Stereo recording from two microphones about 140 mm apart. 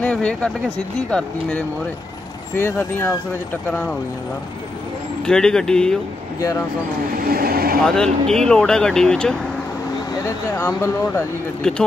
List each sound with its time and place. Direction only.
0.0 s speech: 10° left (ahead or behind)
2.5 s speech: 15° left (ahead or behind)
5.2 s speech: 5° left (ahead or behind)
7.2 s speech: 90° right
7.8 s speech: 5° left (ahead or behind)
10.2 s speech: 15° left (ahead or behind)